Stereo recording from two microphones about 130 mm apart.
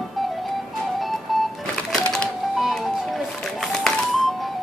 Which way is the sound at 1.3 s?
Centre (ahead or behind).